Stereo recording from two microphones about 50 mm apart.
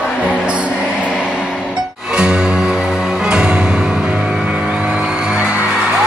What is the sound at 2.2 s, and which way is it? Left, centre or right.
Music, centre.